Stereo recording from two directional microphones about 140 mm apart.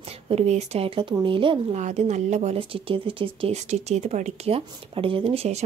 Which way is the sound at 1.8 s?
55° right (ahead or behind).